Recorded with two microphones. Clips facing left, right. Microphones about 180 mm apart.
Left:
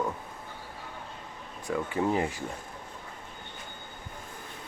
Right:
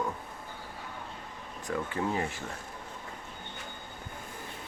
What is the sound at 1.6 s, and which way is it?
Speech, 15° left (ahead or behind).